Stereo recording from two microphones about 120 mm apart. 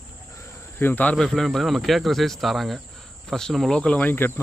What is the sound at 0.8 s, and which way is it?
Speech, 15° left (ahead or behind).